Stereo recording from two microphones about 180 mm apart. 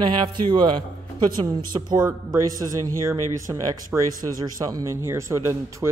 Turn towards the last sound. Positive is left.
turn(degrees=-15)  # may be behind; listen again after turning